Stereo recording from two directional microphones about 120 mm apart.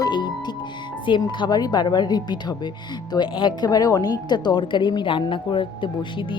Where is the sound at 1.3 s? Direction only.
35° left (ahead or behind).